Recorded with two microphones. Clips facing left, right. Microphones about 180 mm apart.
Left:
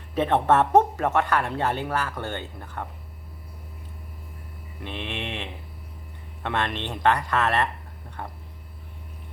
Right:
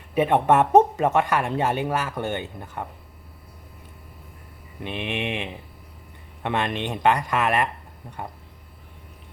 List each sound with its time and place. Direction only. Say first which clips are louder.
0.1 s speech: right 2 dB; 10° right (ahead or behind)
4.8 s speech: right 5 dB; 15° right (ahead or behind)